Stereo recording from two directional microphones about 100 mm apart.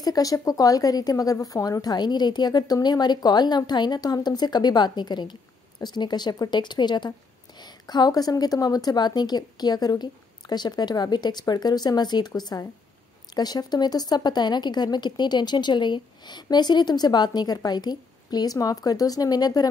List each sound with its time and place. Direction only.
0.0 s a woman's voice: 40° left (ahead or behind)